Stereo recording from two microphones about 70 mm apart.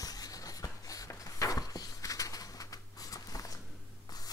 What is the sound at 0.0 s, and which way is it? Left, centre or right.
Writing, left.